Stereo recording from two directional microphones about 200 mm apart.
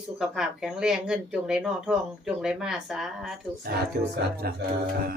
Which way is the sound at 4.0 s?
50° right (ahead or behind).